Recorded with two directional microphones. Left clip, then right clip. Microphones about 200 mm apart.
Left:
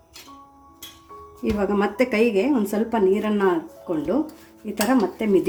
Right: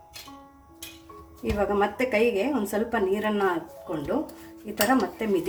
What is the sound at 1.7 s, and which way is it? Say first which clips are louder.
A woman's voice: left 2 dB; 35° left (ahead or behind).